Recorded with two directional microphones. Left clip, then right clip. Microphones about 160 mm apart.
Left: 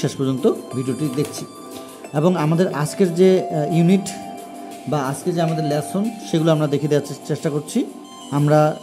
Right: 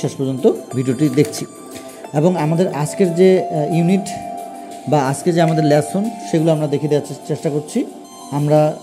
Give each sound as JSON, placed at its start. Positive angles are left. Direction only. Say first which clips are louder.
{"t": 0.0, "sound": "speech", "louder": "right 2 dB", "side_deg": 5}
{"t": 0.7, "sound": "speech", "louder": "right 7 dB", "side_deg": -20}
{"t": 2.1, "sound": "speech", "louder": "right 2 dB", "side_deg": -5}
{"t": 4.8, "sound": "speech", "louder": "right 6 dB", "side_deg": -20}
{"t": 6.3, "sound": "speech", "louder": "right 2 dB", "side_deg": 5}